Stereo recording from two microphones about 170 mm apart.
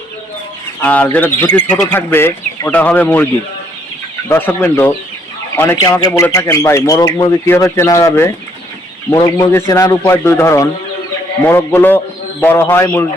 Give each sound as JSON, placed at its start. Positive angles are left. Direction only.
{"t": 0.8, "sound": "speech", "side_deg": 10}
{"t": 4.3, "sound": "speech", "side_deg": 10}